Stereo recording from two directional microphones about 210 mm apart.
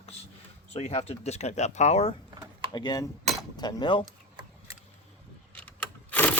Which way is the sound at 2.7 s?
20° left (ahead or behind).